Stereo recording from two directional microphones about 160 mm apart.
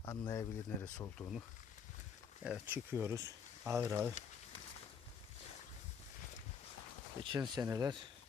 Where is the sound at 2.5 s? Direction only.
10° right (ahead or behind).